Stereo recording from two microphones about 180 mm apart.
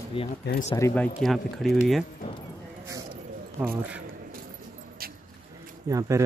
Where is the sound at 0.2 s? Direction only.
30° left (ahead or behind).